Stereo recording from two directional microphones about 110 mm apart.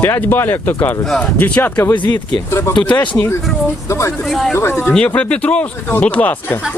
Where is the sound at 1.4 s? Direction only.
15° left (ahead or behind).